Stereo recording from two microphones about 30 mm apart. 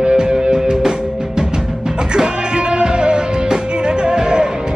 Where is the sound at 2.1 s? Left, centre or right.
Right.